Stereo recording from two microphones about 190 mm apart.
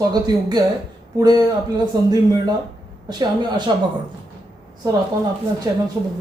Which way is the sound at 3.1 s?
20° right (ahead or behind).